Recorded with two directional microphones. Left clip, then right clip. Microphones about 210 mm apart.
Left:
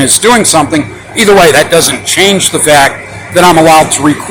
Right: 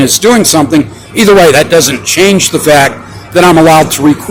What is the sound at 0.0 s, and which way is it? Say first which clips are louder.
Speech: even; 35° right (ahead or behind).